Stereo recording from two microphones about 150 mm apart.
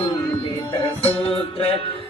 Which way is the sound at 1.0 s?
40° left (ahead or behind).